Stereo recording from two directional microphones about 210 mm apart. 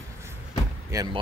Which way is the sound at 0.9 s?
15° right (ahead or behind).